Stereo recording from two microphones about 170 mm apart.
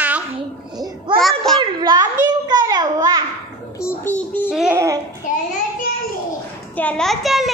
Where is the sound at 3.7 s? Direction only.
15° left (ahead or behind).